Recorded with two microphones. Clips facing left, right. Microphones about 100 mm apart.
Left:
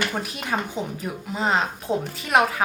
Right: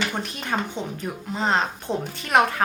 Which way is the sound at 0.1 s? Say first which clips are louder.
Even; 5° left (ahead or behind).